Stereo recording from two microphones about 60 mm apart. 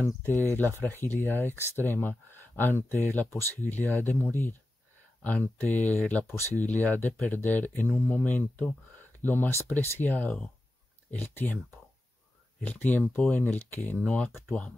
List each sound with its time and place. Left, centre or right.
0.0 s speech: left
5.2 s speech: left
12.6 s speech: left